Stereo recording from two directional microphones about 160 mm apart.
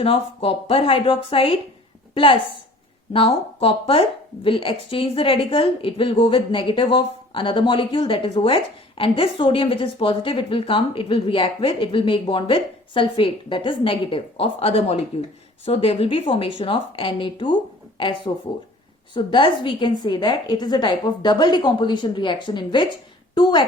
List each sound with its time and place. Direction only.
0.0 s a woman's voice: 35° left (ahead or behind)